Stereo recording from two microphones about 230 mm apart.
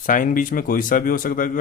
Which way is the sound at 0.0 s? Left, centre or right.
Left.